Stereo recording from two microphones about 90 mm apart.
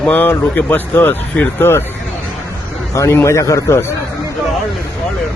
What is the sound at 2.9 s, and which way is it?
Speech, 35° left (ahead or behind).